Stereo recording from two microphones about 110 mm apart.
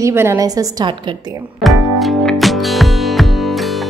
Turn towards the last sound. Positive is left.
turn(degrees=0)  # may be behind; listen again after turning